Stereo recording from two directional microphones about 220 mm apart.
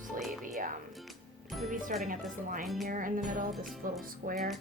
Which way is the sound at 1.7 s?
35° right (ahead or behind).